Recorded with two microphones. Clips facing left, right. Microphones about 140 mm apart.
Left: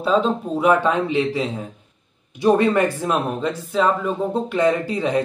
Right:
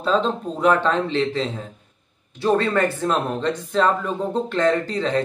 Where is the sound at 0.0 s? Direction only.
10° left (ahead or behind).